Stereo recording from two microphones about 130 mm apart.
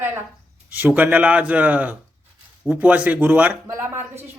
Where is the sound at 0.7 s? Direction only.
15° right (ahead or behind).